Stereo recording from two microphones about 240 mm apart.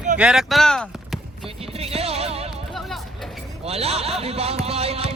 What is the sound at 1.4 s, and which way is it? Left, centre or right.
Music, right.